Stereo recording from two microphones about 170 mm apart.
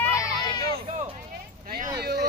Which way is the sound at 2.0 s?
65° right (ahead or behind).